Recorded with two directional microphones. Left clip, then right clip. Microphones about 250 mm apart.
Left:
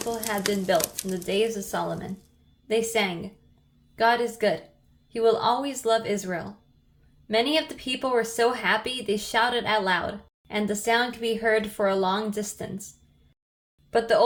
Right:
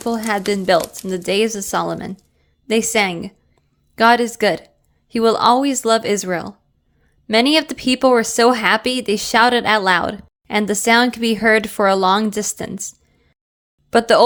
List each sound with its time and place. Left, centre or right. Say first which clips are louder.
0.1 s speech: right 8 dB; right
13.9 s speech: right 9 dB; right